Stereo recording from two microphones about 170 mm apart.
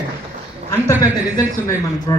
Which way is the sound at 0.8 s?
20° left (ahead or behind).